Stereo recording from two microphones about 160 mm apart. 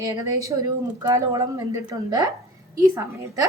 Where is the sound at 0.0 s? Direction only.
20° right (ahead or behind).